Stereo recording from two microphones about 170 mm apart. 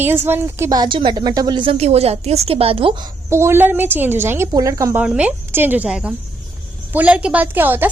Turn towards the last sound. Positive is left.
turn(degrees=-10)  # may be behind; listen again after turning